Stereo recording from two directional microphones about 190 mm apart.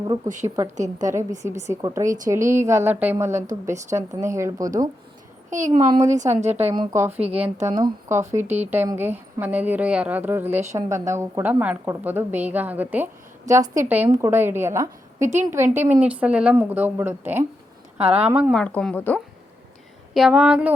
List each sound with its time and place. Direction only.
0.4 s a woman's voice: 15° right (ahead or behind)
0.8 s a woman's voice: 40° right (ahead or behind)
1.4 s a woman's voice: 15° right (ahead or behind)
5.5 s a woman's voice: 40° right (ahead or behind)
6.7 s a woman's voice: 15° right (ahead or behind)
7.1 s a woman's voice: 30° right (ahead or behind)
7.7 s a woman's voice: 20° right (ahead or behind)
8.4 s a woman's voice: 35° right (ahead or behind)
8.7 s a woman's voice: 10° right (ahead or behind)
18.6 s speech: 5° left (ahead or behind)
20.1 s speech: 5° right (ahead or behind)